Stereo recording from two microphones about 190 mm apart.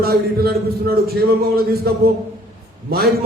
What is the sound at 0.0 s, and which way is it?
A man's voice, 55° right (ahead or behind).